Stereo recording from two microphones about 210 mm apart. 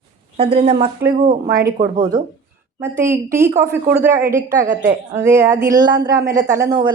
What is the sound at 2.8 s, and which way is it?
A woman's voice, 15° right (ahead or behind).